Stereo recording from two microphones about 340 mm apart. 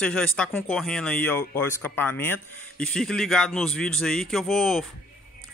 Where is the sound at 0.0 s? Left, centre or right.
Centre.